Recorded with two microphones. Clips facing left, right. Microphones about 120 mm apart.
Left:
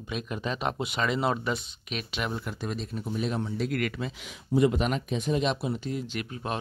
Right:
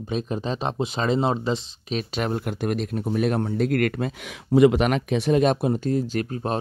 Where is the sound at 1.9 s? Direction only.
40° right (ahead or behind).